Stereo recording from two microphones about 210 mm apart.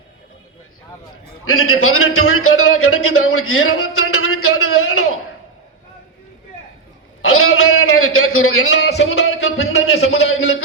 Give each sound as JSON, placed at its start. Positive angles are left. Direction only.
{"t": 1.5, "sound": "a man's voice", "side_deg": 90}
{"t": 7.2, "sound": "a sound", "side_deg": 80}
{"t": 8.9, "sound": "speech", "side_deg": 55}
{"t": 9.4, "sound": "speech", "side_deg": 75}